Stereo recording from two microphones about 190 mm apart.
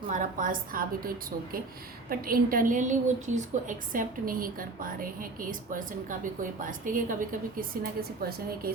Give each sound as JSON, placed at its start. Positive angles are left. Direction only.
{"t": 0.1, "sound": "a woman's voice", "side_deg": -45}